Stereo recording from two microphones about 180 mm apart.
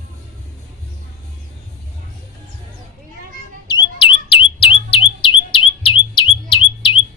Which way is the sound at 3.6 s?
30° left (ahead or behind).